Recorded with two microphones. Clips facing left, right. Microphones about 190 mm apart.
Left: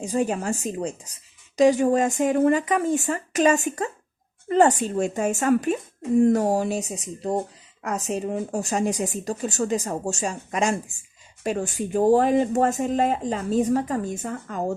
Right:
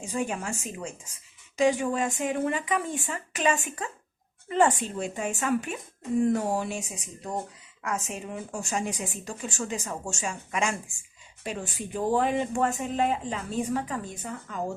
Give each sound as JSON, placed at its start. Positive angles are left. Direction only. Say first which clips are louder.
{"t": 0.0, "sound": "speech", "louder": "left 6 dB", "side_deg": 40}